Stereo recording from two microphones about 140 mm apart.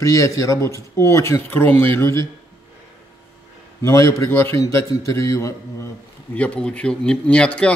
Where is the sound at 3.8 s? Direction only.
20° left (ahead or behind).